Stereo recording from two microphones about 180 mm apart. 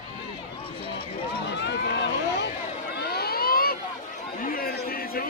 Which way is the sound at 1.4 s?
75° left (ahead or behind).